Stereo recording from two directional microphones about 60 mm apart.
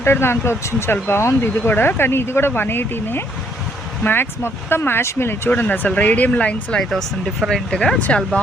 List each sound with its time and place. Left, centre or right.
0.0 s speech: left
5.5 s speech: left
6.9 s speech: centre
7.5 s speech: centre